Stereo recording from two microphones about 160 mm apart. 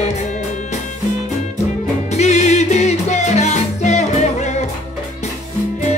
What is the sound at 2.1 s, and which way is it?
Music, 45° left (ahead or behind).